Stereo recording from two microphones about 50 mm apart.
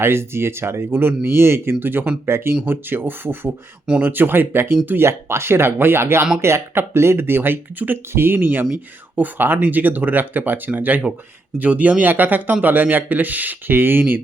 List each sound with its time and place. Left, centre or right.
0.0 s speech: right
1.8 s speech: right
2.2 s speech: right
4.9 s speech: right
13.7 s speech: right